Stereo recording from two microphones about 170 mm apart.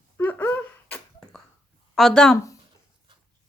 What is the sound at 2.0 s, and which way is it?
Speech, 5° left (ahead or behind).